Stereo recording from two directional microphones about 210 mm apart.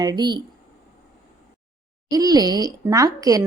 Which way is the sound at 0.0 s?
20° right (ahead or behind).